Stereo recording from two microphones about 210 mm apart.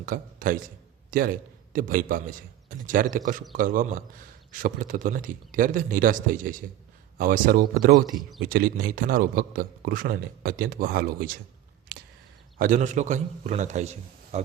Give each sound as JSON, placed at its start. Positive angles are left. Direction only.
{"t": 0.0, "sound": "a man's voice", "side_deg": -40}
{"t": 12.5, "sound": "speech", "side_deg": -40}